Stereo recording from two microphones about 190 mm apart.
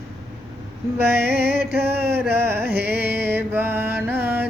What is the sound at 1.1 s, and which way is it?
Music, 55° right (ahead or behind).